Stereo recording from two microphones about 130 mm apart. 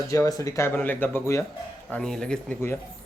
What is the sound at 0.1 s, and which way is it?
Speech, 25° left (ahead or behind).